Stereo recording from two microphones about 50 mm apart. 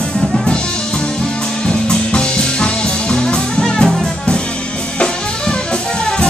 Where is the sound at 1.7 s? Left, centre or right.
Centre.